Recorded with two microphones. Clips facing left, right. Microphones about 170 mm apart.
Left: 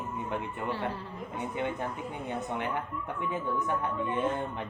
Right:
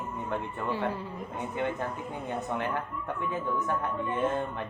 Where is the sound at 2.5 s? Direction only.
20° left (ahead or behind).